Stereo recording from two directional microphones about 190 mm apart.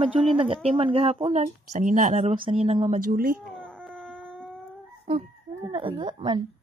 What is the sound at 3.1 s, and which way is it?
Speech, 50° right (ahead or behind).